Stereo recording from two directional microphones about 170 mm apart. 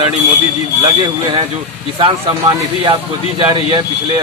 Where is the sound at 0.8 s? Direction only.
25° right (ahead or behind).